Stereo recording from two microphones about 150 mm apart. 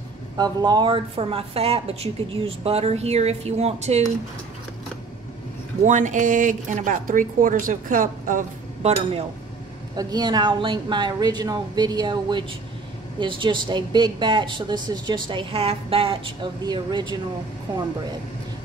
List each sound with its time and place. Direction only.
0.4 s a woman's voice: 25° right (ahead or behind); by 4.0 s 45° right (ahead or behind)
5.9 s speech: 55° right (ahead or behind)
9.9 s a woman's voice: 25° right (ahead or behind)